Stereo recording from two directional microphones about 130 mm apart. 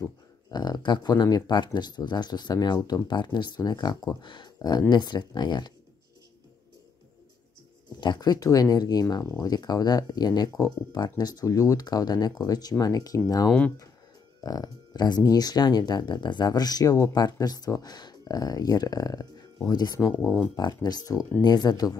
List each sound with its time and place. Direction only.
0.5 s speech: 30° left (ahead or behind)
8.0 s speech: 35° left (ahead or behind)
13.5 s speech: 10° left (ahead or behind)
14.4 s speech: 30° left (ahead or behind)